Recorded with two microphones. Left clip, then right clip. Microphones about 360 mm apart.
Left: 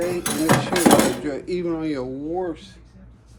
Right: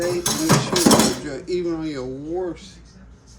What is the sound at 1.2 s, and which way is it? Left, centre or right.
Speech, left.